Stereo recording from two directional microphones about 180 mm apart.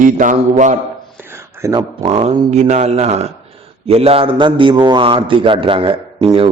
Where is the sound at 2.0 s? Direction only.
40° right (ahead or behind).